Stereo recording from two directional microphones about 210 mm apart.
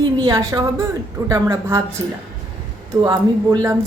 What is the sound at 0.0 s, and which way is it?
A woman's voice, 20° right (ahead or behind).